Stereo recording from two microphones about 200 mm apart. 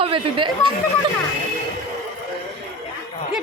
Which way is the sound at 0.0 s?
25° right (ahead or behind).